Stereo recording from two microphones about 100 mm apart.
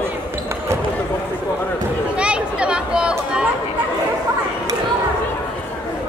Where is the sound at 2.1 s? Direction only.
10° right (ahead or behind).